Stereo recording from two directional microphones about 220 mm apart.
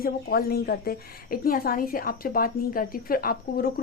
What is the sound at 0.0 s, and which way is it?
A woman's voice, 45° left (ahead or behind).